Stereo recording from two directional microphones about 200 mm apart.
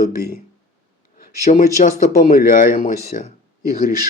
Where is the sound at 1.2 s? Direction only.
45° left (ahead or behind).